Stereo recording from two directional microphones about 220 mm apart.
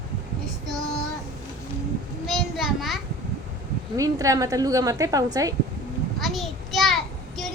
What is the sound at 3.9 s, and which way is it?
A woman's voice, 15° right (ahead or behind).